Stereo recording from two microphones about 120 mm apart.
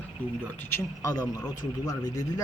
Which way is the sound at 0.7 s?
30° left (ahead or behind).